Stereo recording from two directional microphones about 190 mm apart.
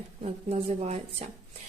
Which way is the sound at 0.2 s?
35° right (ahead or behind).